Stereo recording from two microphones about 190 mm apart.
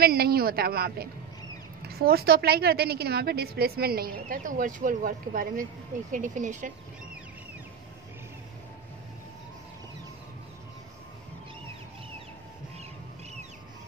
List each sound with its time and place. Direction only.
0.0 s a woman's voice: 55° right (ahead or behind)